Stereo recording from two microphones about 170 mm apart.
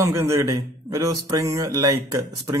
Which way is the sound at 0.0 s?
15° right (ahead or behind).